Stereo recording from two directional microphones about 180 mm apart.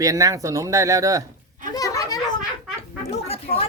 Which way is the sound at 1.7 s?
20° left (ahead or behind).